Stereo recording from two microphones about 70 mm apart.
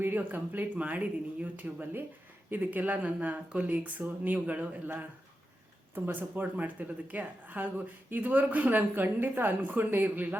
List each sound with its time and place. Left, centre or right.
0.0 s speech: right